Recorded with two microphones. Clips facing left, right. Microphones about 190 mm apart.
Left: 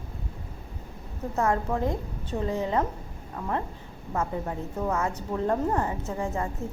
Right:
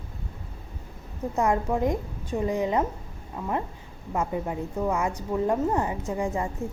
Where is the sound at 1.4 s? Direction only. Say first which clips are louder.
Right 2 dB; 15° right (ahead or behind).